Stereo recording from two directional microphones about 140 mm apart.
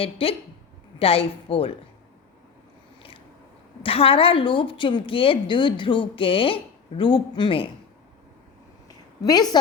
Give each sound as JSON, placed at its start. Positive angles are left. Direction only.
{"t": 0.0, "sound": "speech", "side_deg": 45}
{"t": 3.8, "sound": "a woman's voice", "side_deg": 40}
{"t": 9.2, "sound": "a woman's voice", "side_deg": 30}